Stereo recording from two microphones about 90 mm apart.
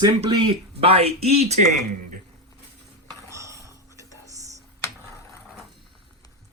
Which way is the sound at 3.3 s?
35° right (ahead or behind).